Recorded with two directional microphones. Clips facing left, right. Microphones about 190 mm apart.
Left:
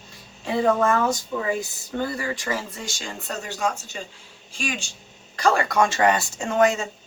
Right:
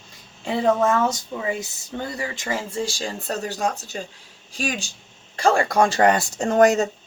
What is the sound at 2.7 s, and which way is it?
Speech, 30° right (ahead or behind).